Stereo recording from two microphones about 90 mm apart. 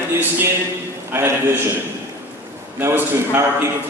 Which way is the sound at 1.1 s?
25° right (ahead or behind).